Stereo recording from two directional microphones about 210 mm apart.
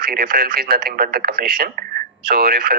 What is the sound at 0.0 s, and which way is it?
Speech, 45° right (ahead or behind).